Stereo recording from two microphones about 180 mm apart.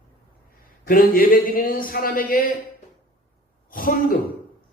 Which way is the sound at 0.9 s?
50° left (ahead or behind).